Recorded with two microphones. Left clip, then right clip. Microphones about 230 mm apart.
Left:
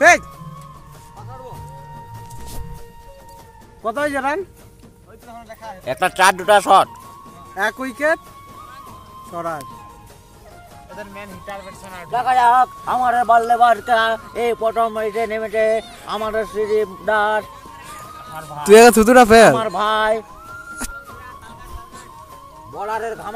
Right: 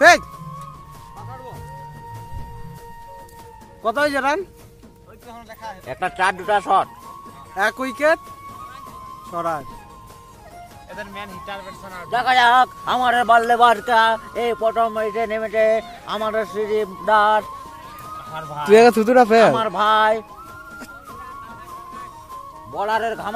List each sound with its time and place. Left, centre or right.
3.8 s speech: centre
5.3 s a sound: right
5.9 s speech: left
7.5 s speech: centre
9.3 s speech: centre
12.1 s a man's voice: right
13.6 s speech: right
13.8 s a man's voice: right
14.3 s speech: centre; by 17.5 s right
18.7 s speech: centre
19.5 s speech: centre
22.8 s speech: right